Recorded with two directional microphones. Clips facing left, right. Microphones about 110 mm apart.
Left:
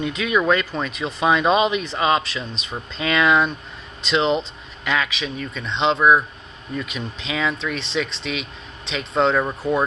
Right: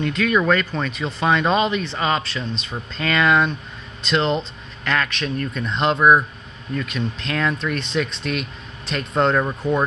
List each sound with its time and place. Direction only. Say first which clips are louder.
0.0 s a man's voice: right 1 dB; 10° left (ahead or behind)